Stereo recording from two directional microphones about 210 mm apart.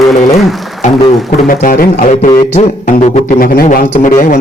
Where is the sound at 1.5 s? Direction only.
40° left (ahead or behind).